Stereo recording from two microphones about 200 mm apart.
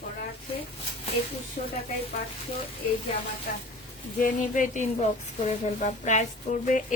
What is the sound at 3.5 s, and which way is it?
Speech, 45° left (ahead or behind).